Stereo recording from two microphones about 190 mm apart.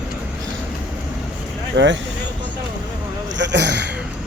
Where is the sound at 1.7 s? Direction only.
70° right (ahead or behind).